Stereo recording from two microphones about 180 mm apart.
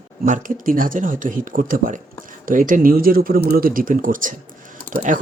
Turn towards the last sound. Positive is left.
turn(degrees=-45)  # may be behind; listen again after turning